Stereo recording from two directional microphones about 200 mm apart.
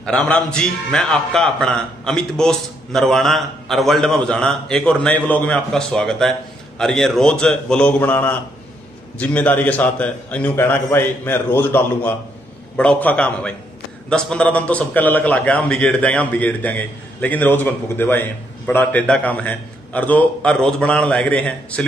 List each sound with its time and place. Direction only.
0.0 s a man's voice: 5° left (ahead or behind)